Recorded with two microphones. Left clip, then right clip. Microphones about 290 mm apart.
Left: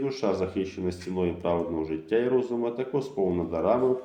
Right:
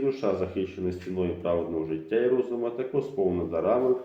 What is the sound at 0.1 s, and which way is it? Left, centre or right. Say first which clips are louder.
Speech: even; left.